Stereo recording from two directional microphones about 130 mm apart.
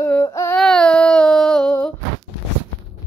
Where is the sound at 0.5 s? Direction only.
5° left (ahead or behind).